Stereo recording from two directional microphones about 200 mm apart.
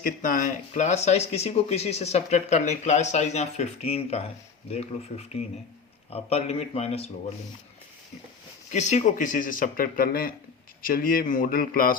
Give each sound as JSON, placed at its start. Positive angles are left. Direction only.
{"t": 0.0, "sound": "speech", "side_deg": 40}
{"t": 8.7, "sound": "speech", "side_deg": 35}